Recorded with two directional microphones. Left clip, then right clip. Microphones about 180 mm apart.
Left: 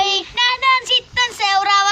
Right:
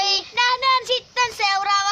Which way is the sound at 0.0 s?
35° right (ahead or behind).